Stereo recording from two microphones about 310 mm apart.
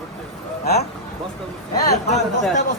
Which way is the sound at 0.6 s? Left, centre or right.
Left.